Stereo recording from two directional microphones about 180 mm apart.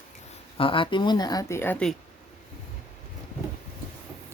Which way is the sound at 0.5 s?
30° left (ahead or behind).